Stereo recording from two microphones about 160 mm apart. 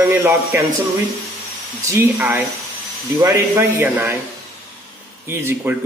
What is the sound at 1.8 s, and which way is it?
Speech, 15° right (ahead or behind).